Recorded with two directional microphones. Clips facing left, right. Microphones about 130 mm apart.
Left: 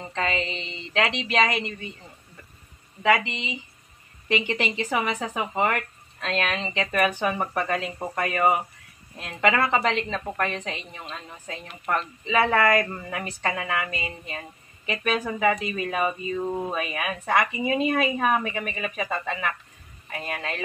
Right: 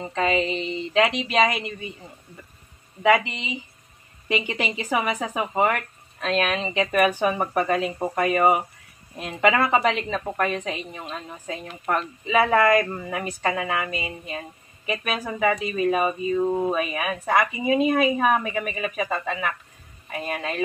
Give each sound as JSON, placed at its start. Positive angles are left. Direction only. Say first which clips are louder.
{"t": 0.0, "sound": "a woman's voice", "louder": "right 5 dB", "side_deg": -10}
{"t": 3.0, "sound": "a woman's voice", "louder": "right 3 dB", "side_deg": -15}